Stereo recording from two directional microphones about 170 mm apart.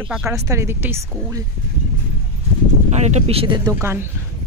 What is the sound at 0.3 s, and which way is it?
Speech, 15° right (ahead or behind).